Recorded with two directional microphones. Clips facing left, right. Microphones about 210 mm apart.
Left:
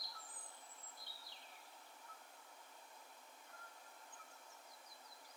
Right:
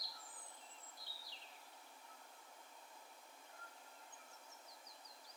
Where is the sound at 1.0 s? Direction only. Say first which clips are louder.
Even; 55° left (ahead or behind).